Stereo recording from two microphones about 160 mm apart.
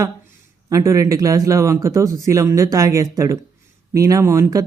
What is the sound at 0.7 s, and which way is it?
Speech, 20° right (ahead or behind).